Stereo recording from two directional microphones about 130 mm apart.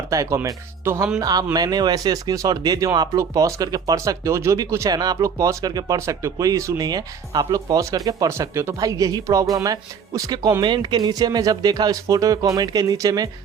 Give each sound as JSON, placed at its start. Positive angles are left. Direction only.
{"t": 0.1, "sound": "speech", "side_deg": -25}